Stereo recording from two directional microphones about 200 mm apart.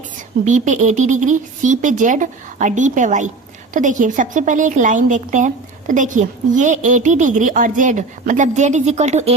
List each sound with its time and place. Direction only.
0.4 s a woman's voice: 40° right (ahead or behind)